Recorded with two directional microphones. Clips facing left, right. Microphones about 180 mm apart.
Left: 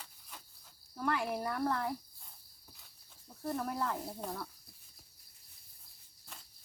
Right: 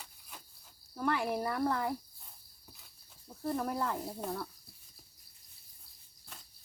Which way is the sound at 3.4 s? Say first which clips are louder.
Right 2 dB; 5° right (ahead or behind).